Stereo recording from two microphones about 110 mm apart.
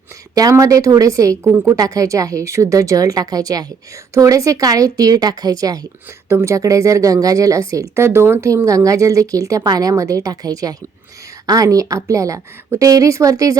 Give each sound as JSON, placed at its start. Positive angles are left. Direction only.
{"t": 0.3, "sound": "a woman's voice", "side_deg": -30}
{"t": 1.5, "sound": "a woman's voice", "side_deg": -20}
{"t": 1.7, "sound": "a woman's voice", "side_deg": -30}
{"t": 6.2, "sound": "a woman's voice", "side_deg": -25}